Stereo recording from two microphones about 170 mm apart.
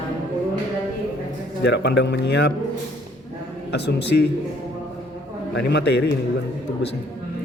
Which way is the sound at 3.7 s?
85° left.